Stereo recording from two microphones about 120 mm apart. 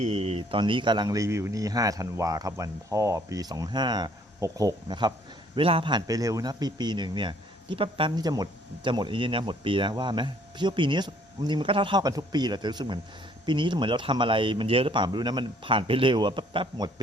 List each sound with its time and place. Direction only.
0.0 s a man's voice: 55° right (ahead or behind); by 5.1 s 40° right (ahead or behind)
5.5 s a man's voice: 50° right (ahead or behind)
6.1 s a man's voice: 30° right (ahead or behind)